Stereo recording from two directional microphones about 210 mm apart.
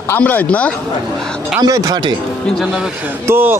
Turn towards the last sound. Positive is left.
turn(degrees=-10)  # may be behind; listen again after turning